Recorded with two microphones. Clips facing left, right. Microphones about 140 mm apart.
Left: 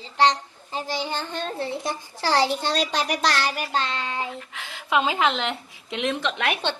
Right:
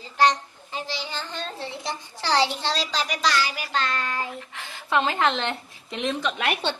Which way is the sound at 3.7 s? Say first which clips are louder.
Even; 25° left (ahead or behind).